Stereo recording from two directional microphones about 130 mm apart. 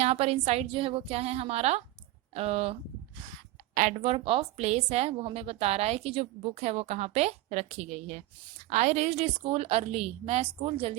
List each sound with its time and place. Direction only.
0.0 s a woman's voice: 50° right (ahead or behind)
4.0 s a woman's voice: 45° right (ahead or behind)